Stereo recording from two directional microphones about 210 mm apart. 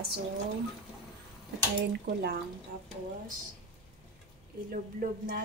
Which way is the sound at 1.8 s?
50° right (ahead or behind).